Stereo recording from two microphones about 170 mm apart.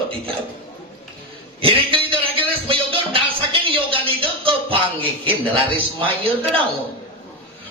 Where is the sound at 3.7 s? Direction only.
30° right (ahead or behind).